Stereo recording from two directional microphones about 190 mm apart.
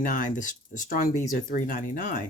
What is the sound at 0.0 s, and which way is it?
Speech, 45° left (ahead or behind).